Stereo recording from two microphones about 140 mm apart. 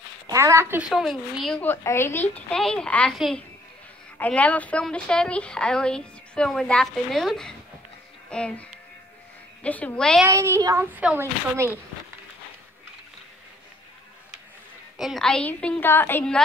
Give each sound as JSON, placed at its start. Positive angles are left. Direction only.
{"t": 0.3, "sound": "speech", "side_deg": -20}
{"t": 0.8, "sound": "a woman's voice", "side_deg": -5}
{"t": 1.6, "sound": "a woman's voice", "side_deg": 15}
{"t": 2.5, "sound": "a woman's voice", "side_deg": 5}
{"t": 10.2, "sound": "speech", "side_deg": -20}
{"t": 10.9, "sound": "speech", "side_deg": -10}
{"t": 15.0, "sound": "a woman's voice", "side_deg": 0}